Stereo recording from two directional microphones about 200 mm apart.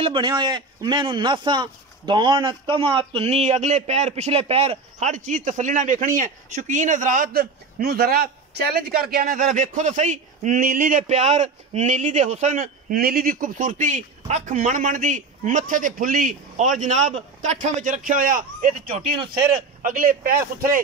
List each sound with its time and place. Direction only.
0.0 s a man's voice: 25° right (ahead or behind)
12.9 s a man's voice: 50° right (ahead or behind)